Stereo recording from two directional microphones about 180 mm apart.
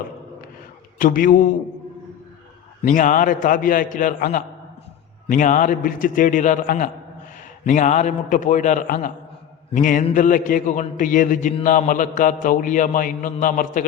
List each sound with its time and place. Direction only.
0.9 s a man's voice: 50° left (ahead or behind)
2.8 s a man's voice: 45° left (ahead or behind)